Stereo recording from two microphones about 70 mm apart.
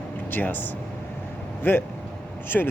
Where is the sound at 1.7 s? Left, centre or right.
Left.